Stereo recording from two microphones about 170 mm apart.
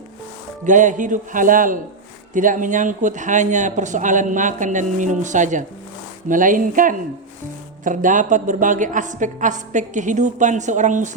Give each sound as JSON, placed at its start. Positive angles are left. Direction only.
{"t": 0.6, "sound": "speech", "side_deg": -45}